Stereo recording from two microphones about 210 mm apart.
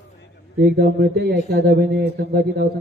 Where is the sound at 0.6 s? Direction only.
50° right (ahead or behind).